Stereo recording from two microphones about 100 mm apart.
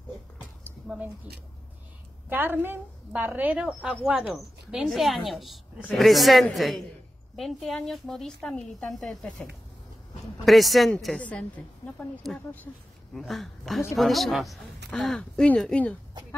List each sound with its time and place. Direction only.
0.8 s speech: 15° right (ahead or behind)
2.2 s a woman's voice: 20° right (ahead or behind); by 11.1 s centre (ahead or behind)
11.1 s a woman's voice: 15° left (ahead or behind)
13.1 s speech: centre (ahead or behind)